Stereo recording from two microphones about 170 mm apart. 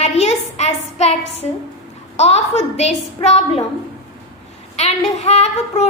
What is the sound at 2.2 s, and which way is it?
A woman's voice, 40° left (ahead or behind).